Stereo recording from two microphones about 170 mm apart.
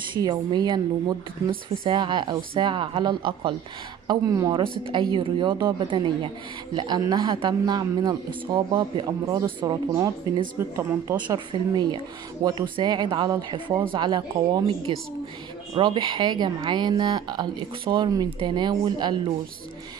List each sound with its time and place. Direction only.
0.1 s speech: 25° right (ahead or behind)
11.1 s speech: 30° right (ahead or behind)